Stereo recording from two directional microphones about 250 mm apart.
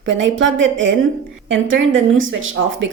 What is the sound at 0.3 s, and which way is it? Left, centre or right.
A woman's voice, right.